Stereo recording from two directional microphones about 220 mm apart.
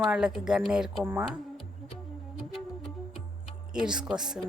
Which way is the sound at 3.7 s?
5° right (ahead or behind).